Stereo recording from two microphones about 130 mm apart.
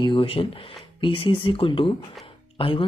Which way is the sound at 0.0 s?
40° left (ahead or behind).